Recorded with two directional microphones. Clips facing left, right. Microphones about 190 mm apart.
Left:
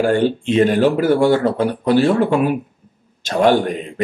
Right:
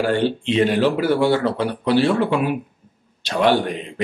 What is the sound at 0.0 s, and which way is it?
Speech, 45° left (ahead or behind).